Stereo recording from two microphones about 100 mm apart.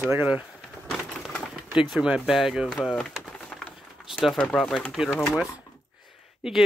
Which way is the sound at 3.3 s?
10° left (ahead or behind).